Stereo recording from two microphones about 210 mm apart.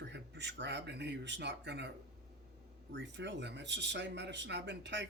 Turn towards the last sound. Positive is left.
turn(degrees=-55)  # may be behind; listen again after turning